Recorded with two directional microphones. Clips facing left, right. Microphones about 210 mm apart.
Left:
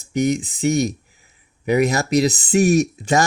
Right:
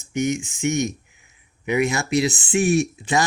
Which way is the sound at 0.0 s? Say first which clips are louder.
Left 4 dB; 35° left (ahead or behind).